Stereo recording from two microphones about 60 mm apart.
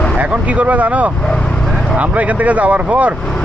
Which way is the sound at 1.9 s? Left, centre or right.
Right.